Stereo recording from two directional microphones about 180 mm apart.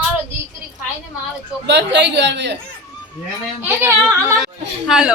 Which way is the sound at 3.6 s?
15° right (ahead or behind).